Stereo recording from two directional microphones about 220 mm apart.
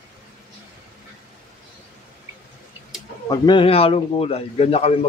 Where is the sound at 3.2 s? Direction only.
20° left (ahead or behind).